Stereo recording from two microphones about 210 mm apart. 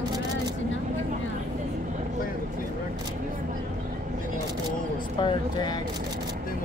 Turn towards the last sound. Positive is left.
turn(degrees=20)  # may be behind; listen again after turning